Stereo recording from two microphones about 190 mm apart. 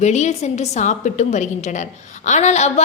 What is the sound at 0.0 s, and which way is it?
A woman's voice, 35° left (ahead or behind).